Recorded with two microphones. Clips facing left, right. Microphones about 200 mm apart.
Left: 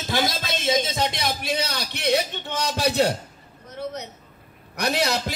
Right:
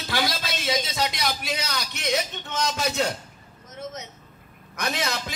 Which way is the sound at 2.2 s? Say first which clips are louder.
Left 1 dB; 35° left (ahead or behind).